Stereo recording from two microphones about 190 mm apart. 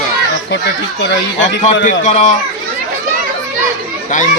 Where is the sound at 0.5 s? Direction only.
65° left (ahead or behind).